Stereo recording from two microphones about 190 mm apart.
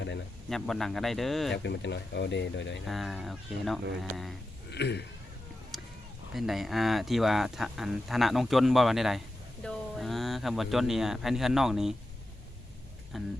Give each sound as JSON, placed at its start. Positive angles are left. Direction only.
{"t": 0.5, "sound": "speech", "side_deg": 0}
{"t": 1.5, "sound": "speech", "side_deg": 65}
{"t": 2.8, "sound": "speech", "side_deg": 0}
{"t": 4.7, "sound": "speech", "side_deg": 60}
{"t": 6.3, "sound": "speech", "side_deg": 0}
{"t": 13.1, "sound": "speech", "side_deg": 0}